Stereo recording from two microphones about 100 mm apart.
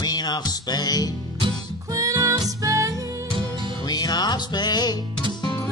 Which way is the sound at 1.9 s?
35° right (ahead or behind).